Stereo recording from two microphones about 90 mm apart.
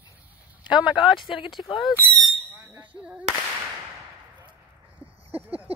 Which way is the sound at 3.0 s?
10° right (ahead or behind).